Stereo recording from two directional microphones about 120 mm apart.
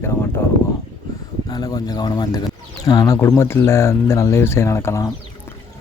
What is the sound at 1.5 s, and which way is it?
Speech, 35° left (ahead or behind).